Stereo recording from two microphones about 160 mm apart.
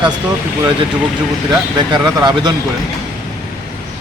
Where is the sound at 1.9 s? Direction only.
25° right (ahead or behind).